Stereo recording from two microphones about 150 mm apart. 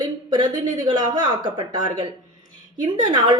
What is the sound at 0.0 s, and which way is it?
Speech, 30° right (ahead or behind).